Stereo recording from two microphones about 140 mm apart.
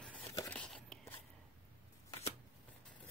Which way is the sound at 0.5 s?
5° left (ahead or behind).